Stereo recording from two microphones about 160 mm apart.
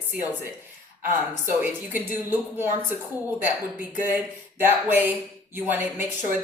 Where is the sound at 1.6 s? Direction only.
10° right (ahead or behind).